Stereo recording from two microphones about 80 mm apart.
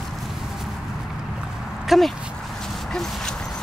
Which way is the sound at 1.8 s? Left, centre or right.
Centre.